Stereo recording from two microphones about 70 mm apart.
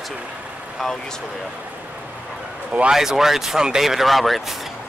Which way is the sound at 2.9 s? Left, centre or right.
Centre.